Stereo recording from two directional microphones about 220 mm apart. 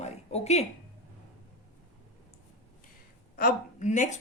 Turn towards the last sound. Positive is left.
turn(degrees=35)  # may be behind; listen again after turning